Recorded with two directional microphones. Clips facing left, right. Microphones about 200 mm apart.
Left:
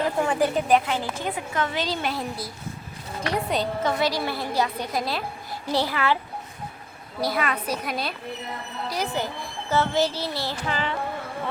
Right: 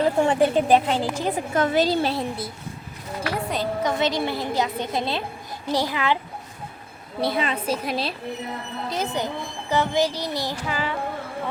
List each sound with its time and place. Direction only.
0.3 s a woman's voice: 25° right (ahead or behind)
3.3 s a woman's voice: centre (ahead or behind)
3.8 s a woman's voice: 20° right (ahead or behind)
7.2 s a woman's voice: 25° right (ahead or behind); by 10.9 s 10° right (ahead or behind)